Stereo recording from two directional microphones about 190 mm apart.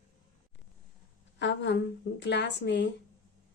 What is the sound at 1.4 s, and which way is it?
A woman's voice, 70° left (ahead or behind).